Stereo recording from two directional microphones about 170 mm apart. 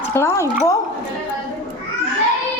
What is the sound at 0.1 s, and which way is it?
Speech, 15° left (ahead or behind).